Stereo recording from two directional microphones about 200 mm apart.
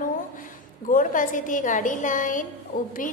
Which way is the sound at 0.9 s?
40° left (ahead or behind).